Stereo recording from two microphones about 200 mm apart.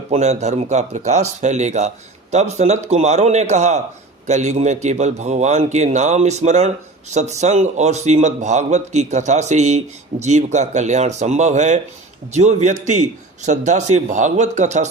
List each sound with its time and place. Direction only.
0.1 s a man's voice: 35° right (ahead or behind)